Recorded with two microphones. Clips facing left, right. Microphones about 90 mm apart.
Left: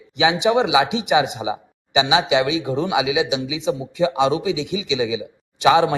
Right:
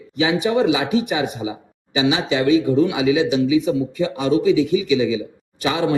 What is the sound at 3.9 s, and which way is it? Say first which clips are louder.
Speech: left 3 dB; 85° left.